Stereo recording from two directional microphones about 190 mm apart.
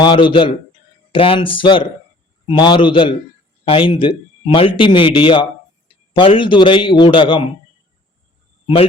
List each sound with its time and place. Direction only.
0.0 s a man's voice: 25° left (ahead or behind)
8.6 s speech: 30° left (ahead or behind)